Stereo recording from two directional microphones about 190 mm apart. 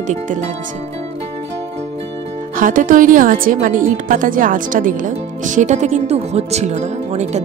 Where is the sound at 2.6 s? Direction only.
45° right (ahead or behind).